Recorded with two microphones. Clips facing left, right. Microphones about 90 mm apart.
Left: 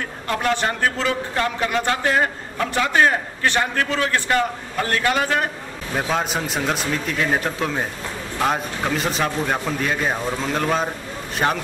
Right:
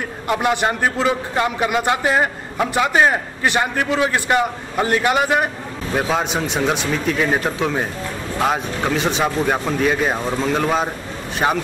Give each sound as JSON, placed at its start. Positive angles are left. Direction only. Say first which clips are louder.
{"t": 0.3, "sound": "a man's voice", "louder": "right 3 dB", "side_deg": -15}
{"t": 5.9, "sound": "a man's voice", "louder": "right 3 dB", "side_deg": -5}